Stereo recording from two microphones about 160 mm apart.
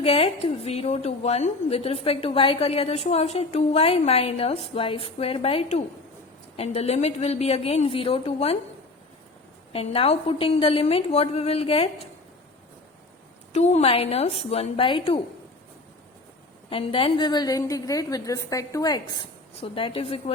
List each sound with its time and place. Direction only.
0.0 s a woman's voice: 40° left (ahead or behind)
9.7 s a woman's voice: 40° left (ahead or behind)
13.5 s a woman's voice: 45° left (ahead or behind)
16.6 s a woman's voice: 35° left (ahead or behind)
19.5 s a woman's voice: 35° left (ahead or behind)